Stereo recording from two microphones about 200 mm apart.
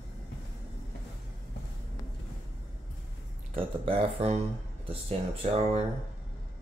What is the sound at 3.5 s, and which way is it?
Speech, 30° right (ahead or behind).